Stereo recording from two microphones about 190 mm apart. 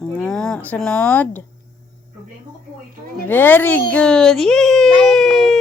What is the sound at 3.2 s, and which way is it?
A child's voice, 10° left (ahead or behind).